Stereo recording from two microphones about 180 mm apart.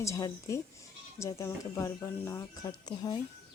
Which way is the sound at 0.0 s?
15° left (ahead or behind).